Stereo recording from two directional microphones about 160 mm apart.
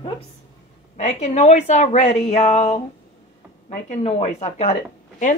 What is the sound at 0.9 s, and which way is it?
A woman's voice, 45° left (ahead or behind).